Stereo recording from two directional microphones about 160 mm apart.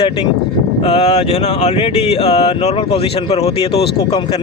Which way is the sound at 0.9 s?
40° left (ahead or behind).